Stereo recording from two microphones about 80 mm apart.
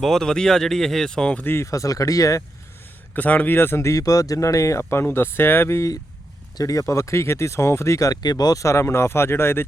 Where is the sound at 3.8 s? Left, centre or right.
Left.